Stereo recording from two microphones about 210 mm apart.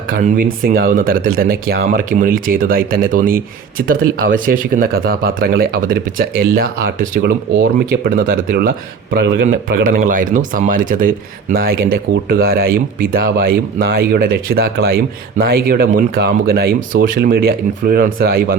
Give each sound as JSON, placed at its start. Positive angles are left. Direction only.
{"t": 0.1, "sound": "speech", "side_deg": -40}